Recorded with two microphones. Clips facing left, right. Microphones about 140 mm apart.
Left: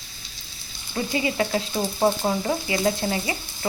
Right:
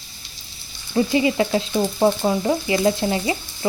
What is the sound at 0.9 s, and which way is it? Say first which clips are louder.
Frying: right 7 dB; 25° right (ahead or behind).